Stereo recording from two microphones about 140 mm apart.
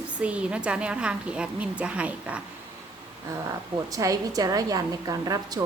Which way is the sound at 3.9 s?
25° right (ahead or behind).